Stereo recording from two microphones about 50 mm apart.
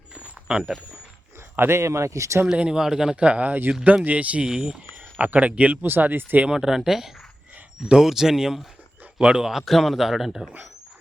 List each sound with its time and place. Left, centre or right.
0.2 s a sound: right
1.5 s speech: right
2.5 s speech: centre
3.2 s speech: right
4.4 s speech: centre
5.1 s speech: right
5.8 s speech: right
6.5 s a man's voice: centre